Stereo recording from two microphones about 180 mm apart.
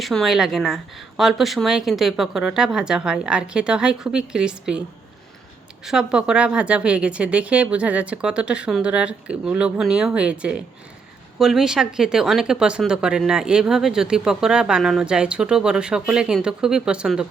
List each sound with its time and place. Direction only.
0.0 s speech: centre (ahead or behind)
5.8 s speech: 5° right (ahead or behind)